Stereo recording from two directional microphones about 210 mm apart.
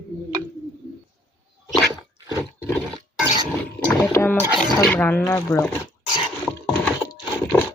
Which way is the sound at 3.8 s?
15° left (ahead or behind).